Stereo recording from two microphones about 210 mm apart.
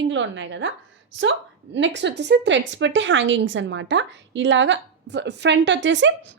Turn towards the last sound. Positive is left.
turn(degrees=-60)  # may be behind; listen again after turning